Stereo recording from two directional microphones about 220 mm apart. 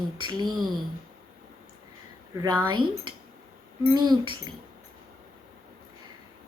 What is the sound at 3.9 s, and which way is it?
Speech, 20° right (ahead or behind).